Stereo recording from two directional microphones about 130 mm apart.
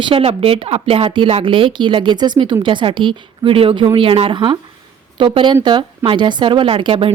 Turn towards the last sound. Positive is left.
turn(degrees=-45)  # may be behind; listen again after turning